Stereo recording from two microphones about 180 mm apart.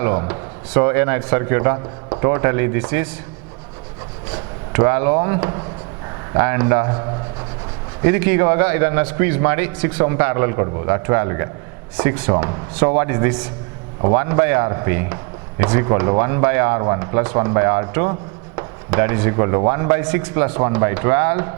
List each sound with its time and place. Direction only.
0.0 s a man's voice: 15° right (ahead or behind)
4.7 s a man's voice: 15° right (ahead or behind)